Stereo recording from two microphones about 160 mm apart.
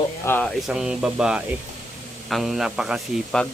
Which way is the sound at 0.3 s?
10° left (ahead or behind).